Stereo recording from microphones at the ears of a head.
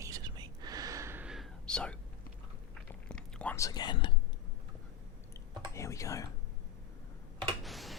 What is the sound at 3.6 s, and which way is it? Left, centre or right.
Whispering, left.